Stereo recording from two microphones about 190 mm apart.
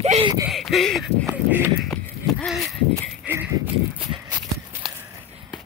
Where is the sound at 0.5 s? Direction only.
Centre (ahead or behind).